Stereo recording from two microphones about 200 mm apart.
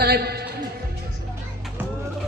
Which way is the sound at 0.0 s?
50° right (ahead or behind).